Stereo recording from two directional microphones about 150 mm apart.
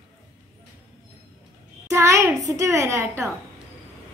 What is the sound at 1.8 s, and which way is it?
A child's voice, 20° right (ahead or behind).